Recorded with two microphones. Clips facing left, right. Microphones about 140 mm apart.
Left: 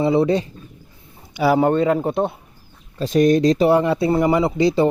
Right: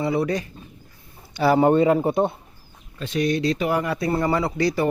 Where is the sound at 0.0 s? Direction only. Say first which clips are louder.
Left 6 dB; 25° left (ahead or behind).